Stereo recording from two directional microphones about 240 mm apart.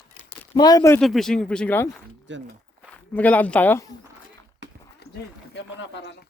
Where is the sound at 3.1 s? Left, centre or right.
Centre.